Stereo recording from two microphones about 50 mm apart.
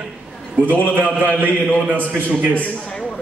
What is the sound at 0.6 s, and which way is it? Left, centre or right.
Speech, right.